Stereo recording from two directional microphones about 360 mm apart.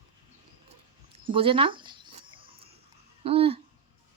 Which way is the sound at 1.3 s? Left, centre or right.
Centre.